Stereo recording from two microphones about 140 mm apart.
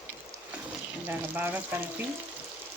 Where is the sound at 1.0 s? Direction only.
15° right (ahead or behind).